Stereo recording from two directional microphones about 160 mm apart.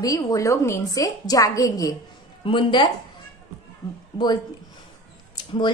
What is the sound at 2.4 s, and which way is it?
Speech, 30° left (ahead or behind).